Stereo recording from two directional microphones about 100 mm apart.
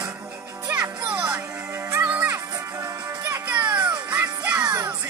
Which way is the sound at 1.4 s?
15° right (ahead or behind).